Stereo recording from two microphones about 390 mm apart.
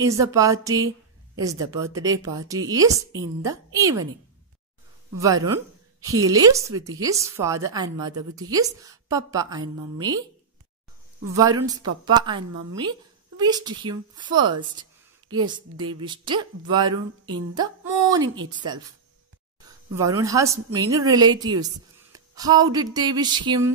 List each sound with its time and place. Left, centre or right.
0.0 s a woman's voice: centre
5.2 s a woman's voice: centre
11.3 s a woman's voice: centre
19.6 s a woman's voice: centre